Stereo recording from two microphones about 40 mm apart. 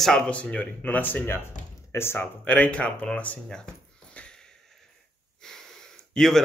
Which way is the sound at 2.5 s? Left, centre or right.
Left.